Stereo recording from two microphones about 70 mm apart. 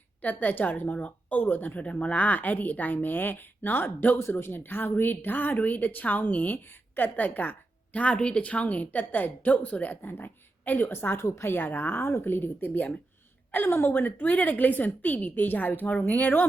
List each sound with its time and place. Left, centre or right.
0.2 s a woman's voice: left